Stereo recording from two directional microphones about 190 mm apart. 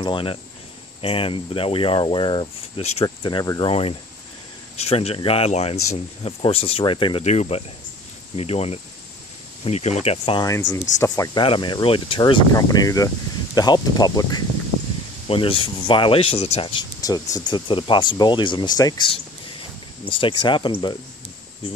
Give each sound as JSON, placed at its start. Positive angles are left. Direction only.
{"t": 0.0, "sound": "speech", "side_deg": 25}
{"t": 10.4, "sound": "speech", "side_deg": 15}